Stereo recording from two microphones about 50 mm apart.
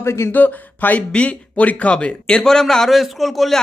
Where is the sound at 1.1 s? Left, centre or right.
Left.